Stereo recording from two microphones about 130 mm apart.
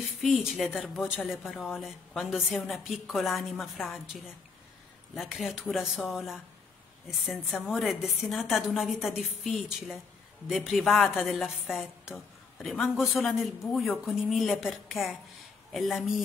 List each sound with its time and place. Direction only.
0.2 s a woman's voice: centre (ahead or behind)